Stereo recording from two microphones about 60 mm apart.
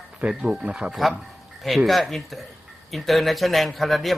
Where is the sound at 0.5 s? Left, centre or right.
Centre.